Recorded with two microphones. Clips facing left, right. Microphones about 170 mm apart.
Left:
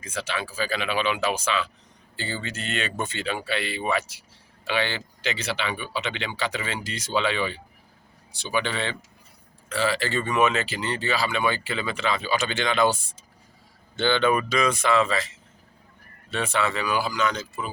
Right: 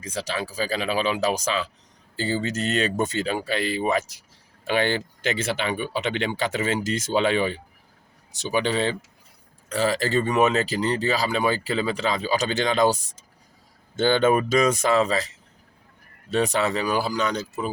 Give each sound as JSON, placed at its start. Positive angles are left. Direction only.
{"t": 0.0, "sound": "speech", "side_deg": -35}